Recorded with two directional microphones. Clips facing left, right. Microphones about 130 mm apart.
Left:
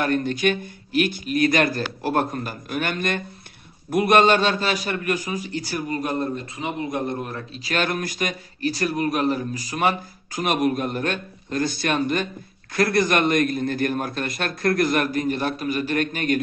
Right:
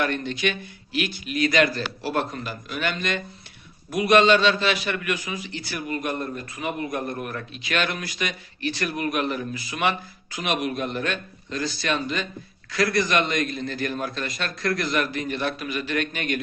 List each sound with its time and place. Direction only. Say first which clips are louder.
0.0 s a man's voice: left 4 dB; 45° left (ahead or behind)